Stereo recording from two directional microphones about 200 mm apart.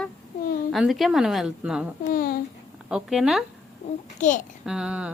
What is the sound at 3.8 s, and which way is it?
Babbling, 30° left (ahead or behind).